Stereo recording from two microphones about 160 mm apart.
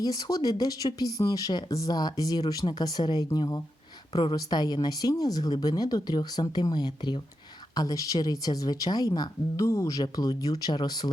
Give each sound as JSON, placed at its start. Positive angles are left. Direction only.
{"t": 0.0, "sound": "speech", "side_deg": 25}